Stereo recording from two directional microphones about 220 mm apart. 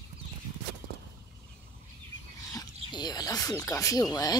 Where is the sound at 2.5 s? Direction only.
20° left (ahead or behind).